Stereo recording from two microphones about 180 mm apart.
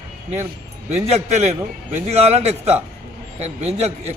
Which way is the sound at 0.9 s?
35° right (ahead or behind).